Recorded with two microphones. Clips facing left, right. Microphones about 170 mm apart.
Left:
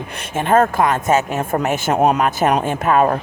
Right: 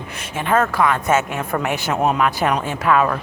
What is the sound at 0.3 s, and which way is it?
Speech, 45° left (ahead or behind).